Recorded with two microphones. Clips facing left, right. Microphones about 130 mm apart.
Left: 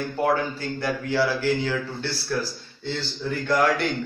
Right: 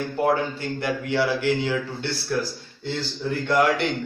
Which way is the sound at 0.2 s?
25° right (ahead or behind).